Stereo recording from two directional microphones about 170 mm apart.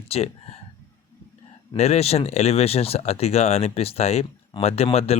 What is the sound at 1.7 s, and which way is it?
Speech, 40° left (ahead or behind).